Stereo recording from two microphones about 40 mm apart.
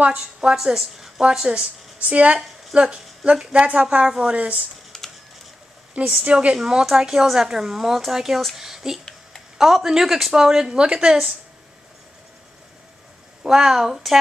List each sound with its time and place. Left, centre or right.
0.4 s speech: centre
1.2 s speech: centre
2.0 s speech: right
2.3 s speech: centre; by 4.6 s right
4.9 s typing: centre
5.9 s speech: right
6.9 s speech: centre
13.4 s speech: centre